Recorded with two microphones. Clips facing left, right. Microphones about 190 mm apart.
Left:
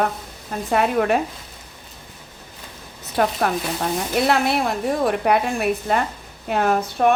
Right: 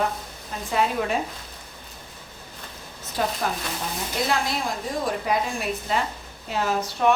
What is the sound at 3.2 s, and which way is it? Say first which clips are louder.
A woman's voice: left 6 dB; 60° left (ahead or behind).